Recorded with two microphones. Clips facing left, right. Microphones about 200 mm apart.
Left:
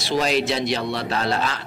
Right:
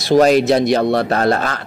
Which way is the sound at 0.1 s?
50° right (ahead or behind).